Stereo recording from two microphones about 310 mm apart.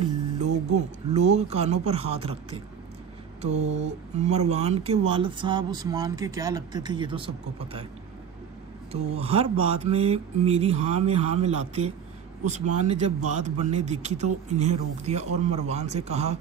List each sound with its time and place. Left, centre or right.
0.7 s speech: right
8.9 s speech: centre